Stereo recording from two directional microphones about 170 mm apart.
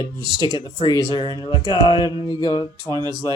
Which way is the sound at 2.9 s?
25° right (ahead or behind).